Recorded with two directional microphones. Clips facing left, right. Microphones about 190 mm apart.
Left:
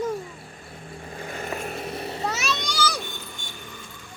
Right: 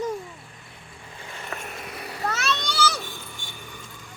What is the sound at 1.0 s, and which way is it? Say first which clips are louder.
Vehicle: left 7 dB; 40° left (ahead or behind).